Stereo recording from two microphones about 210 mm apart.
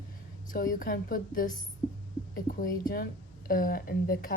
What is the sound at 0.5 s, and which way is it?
A woman's voice, 40° left (ahead or behind).